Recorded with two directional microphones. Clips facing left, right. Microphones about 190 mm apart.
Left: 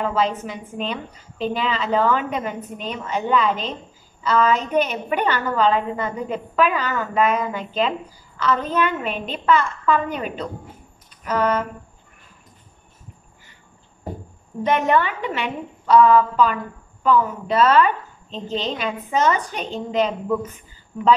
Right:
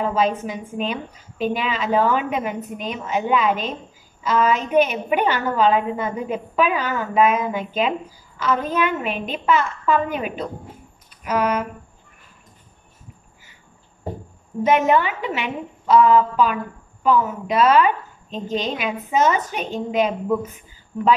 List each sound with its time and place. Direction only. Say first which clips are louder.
0.1 s a woman's voice: right 1 dB; 10° right (ahead or behind)
14.6 s a woman's voice: right 2 dB; 10° right (ahead or behind)